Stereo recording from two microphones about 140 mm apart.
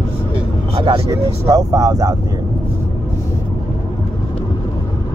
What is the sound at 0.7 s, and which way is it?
Vehicle, 40° right (ahead or behind).